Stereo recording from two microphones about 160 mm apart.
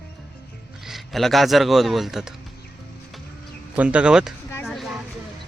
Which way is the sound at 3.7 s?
10° right (ahead or behind).